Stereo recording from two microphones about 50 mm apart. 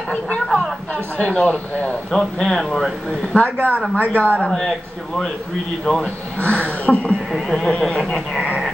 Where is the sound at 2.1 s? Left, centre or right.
Centre.